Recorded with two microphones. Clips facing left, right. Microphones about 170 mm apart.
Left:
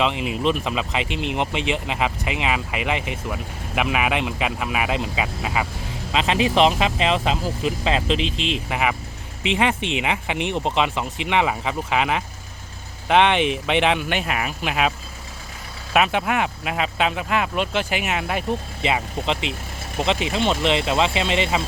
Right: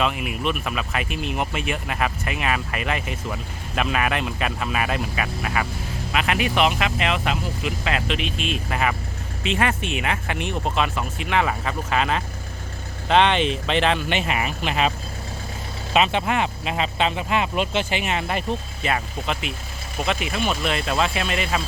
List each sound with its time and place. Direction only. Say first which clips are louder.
0.0 s speech: left 3 dB; 25° left (ahead or behind)
14.1 s speech: right 1 dB; centre (ahead or behind)
18.8 s speech: left 2 dB; 20° left (ahead or behind)